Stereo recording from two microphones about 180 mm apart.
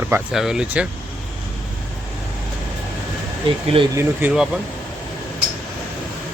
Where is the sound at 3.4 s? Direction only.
30° right (ahead or behind).